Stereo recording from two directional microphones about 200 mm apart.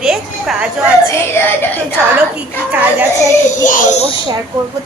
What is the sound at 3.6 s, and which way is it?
Speech, 40° left (ahead or behind).